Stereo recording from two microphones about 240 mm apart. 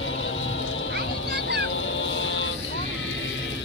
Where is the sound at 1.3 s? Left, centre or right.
Right.